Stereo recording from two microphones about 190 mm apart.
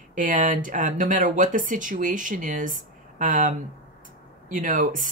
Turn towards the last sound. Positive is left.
turn(degrees=-45)  # may be behind; listen again after turning